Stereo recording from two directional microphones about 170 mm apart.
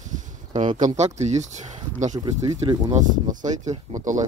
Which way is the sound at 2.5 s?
35° right (ahead or behind).